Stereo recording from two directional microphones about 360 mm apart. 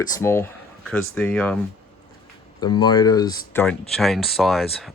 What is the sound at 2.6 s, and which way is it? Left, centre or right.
Speech, centre.